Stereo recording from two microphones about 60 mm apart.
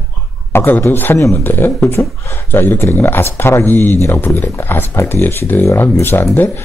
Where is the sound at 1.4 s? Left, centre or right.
Left.